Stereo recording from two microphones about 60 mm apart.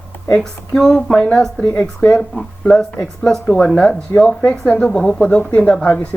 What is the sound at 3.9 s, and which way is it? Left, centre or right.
Speech, centre.